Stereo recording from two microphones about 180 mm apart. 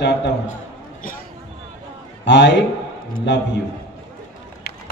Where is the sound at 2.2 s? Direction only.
75° left (ahead or behind).